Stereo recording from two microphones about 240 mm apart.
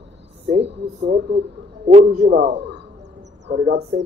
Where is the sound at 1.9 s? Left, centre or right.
Right.